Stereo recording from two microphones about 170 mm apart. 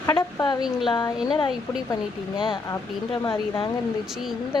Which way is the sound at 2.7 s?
25° left (ahead or behind).